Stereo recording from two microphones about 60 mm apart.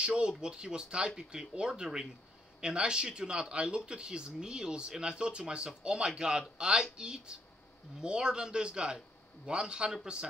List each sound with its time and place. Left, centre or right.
0.0 s speech: centre